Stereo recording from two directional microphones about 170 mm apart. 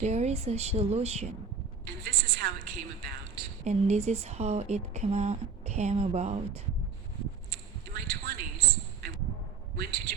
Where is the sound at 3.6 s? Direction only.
40° right (ahead or behind).